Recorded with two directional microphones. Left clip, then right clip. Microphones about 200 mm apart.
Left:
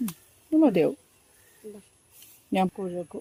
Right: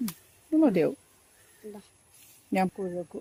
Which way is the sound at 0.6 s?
10° left (ahead or behind).